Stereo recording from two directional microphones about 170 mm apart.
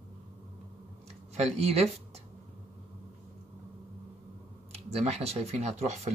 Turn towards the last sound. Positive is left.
turn(degrees=-40)  # may be behind; listen again after turning